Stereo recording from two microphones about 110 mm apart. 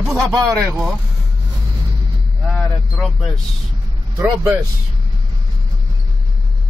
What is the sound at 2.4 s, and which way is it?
Vehicle, 5° left (ahead or behind).